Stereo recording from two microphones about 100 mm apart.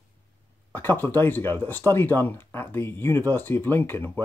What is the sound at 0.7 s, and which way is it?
Speech, 20° left (ahead or behind).